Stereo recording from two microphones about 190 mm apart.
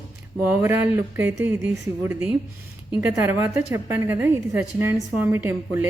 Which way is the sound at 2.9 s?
10° right (ahead or behind).